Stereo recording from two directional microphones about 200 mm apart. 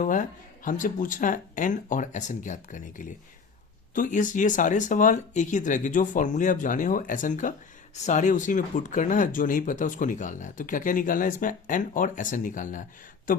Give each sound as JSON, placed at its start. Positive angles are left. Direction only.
{"t": 0.0, "sound": "speech", "side_deg": 40}